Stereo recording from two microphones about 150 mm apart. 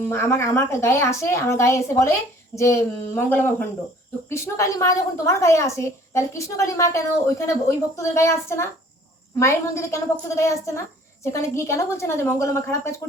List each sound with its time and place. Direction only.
0.1 s a woman's voice: 15° left (ahead or behind)